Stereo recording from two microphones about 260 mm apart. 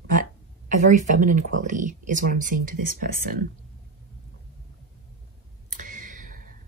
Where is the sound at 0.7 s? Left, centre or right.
Right.